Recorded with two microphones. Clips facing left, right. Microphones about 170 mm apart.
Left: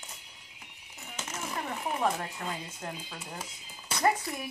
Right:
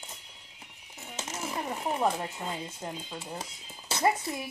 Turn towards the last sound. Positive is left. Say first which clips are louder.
# right 1 dB
turn(degrees=-25)  # may be behind; listen again after turning